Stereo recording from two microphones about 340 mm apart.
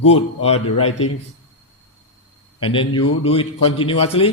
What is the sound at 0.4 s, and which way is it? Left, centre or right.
Speech, centre.